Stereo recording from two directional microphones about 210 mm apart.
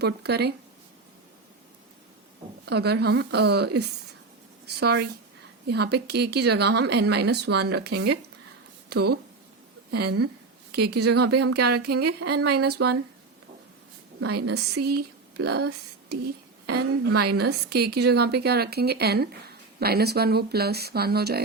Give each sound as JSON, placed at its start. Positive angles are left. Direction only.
{"t": 0.0, "sound": "speech", "side_deg": -50}
{"t": 2.6, "sound": "speech", "side_deg": -50}
{"t": 10.7, "sound": "speech", "side_deg": -50}
{"t": 10.9, "sound": "speech", "side_deg": -90}
{"t": 11.8, "sound": "speech", "side_deg": -50}
{"t": 12.2, "sound": "speech", "side_deg": -90}
{"t": 12.6, "sound": "speech", "side_deg": -50}
{"t": 14.2, "sound": "speech", "side_deg": -90}
{"t": 14.8, "sound": "speech", "side_deg": -50}
{"t": 16.6, "sound": "speech", "side_deg": -90}
{"t": 17.3, "sound": "speech", "side_deg": -50}